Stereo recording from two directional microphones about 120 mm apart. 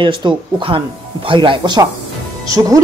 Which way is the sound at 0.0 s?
40° right (ahead or behind).